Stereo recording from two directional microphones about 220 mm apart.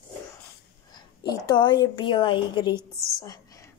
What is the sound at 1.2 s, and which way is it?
A woman's voice, 20° left (ahead or behind).